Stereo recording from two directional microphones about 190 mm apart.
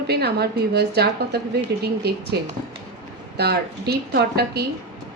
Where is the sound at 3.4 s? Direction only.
60° right (ahead or behind).